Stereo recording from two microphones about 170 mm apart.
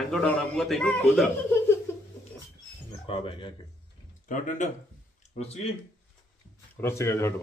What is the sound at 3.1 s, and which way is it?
Speech, 30° left (ahead or behind).